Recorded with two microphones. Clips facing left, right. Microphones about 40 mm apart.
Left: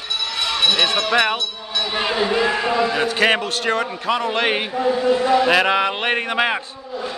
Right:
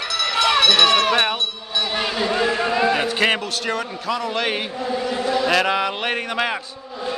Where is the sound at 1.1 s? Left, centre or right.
Left.